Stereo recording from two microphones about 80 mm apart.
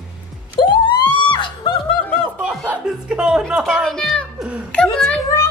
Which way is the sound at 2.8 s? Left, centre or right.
Centre.